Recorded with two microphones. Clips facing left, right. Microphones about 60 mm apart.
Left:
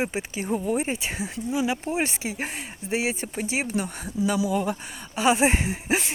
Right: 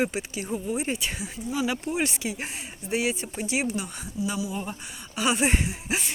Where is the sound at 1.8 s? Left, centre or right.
Left.